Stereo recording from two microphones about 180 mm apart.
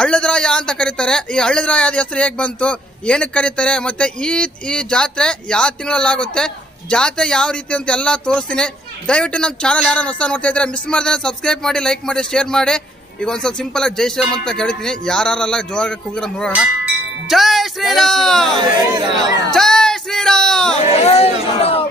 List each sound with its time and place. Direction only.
0.0 s a man's voice: 5° left (ahead or behind)
16.5 s tubular bells: 5° right (ahead or behind)
17.9 s a man's voice: 5° left (ahead or behind)
18.6 s speech: 25° right (ahead or behind)
19.5 s music: 5° left (ahead or behind)
20.7 s speech: 35° left (ahead or behind)